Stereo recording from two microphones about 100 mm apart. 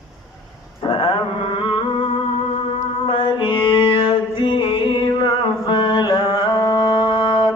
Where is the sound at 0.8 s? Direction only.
55° left (ahead or behind).